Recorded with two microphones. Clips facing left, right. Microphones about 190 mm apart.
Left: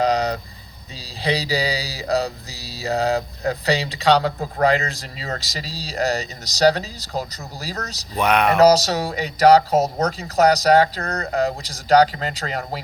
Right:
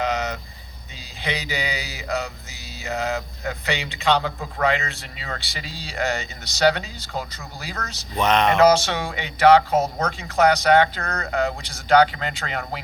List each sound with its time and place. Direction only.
0.0 s vehicle: 35° left (ahead or behind)
1.2 s music: 35° left (ahead or behind)
8.2 s speech: 10° left (ahead or behind)
8.5 s music: 40° left (ahead or behind)